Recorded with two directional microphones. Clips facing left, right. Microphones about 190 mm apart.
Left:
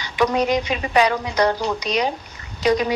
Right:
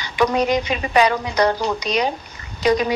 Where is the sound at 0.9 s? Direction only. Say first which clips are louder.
Right 1 dB; 60° right (ahead or behind).